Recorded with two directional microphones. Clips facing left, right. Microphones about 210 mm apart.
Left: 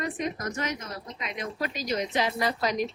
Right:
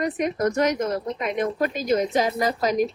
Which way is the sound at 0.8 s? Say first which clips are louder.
Right 13 dB; 55° right (ahead or behind).